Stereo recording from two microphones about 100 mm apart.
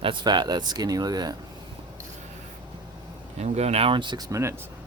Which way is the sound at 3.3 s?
90° right.